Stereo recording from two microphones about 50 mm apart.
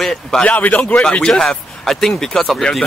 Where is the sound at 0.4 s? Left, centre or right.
Left.